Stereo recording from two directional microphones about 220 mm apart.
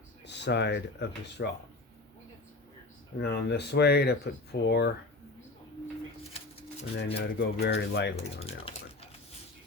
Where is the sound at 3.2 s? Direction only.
50° left (ahead or behind).